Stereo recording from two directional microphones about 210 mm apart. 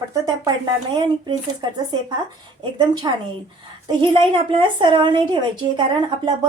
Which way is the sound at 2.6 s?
20° right (ahead or behind).